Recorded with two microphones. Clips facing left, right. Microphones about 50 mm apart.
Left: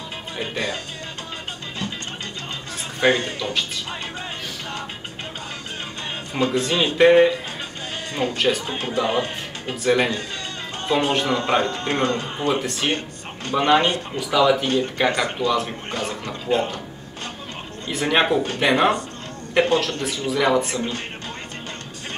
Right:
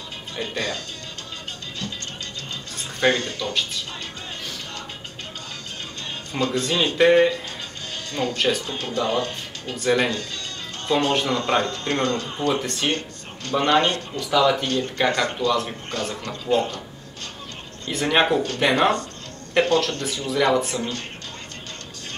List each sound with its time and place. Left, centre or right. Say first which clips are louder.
0.4 s speech: left 1 dB; centre
3.0 s speech: left 2 dB; centre
6.3 s speech: left 2 dB; centre
8.1 s speech: left 1 dB; left
8.4 s speech: left 2 dB; centre
8.6 s speech: left 2 dB; left
9.8 s speech: left 1 dB; centre
12.6 s speech: left 1 dB; centre
12.9 s speech: left 1 dB; centre
17.8 s speech: even; centre